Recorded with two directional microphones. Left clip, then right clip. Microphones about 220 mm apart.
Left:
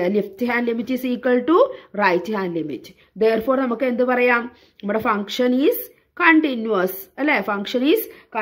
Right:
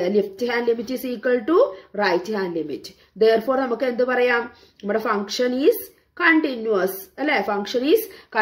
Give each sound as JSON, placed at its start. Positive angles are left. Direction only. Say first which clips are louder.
{"t": 0.0, "sound": "speech", "louder": "even", "side_deg": 35}